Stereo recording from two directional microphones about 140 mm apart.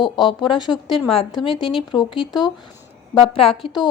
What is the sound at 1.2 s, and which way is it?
Speech, 35° left (ahead or behind).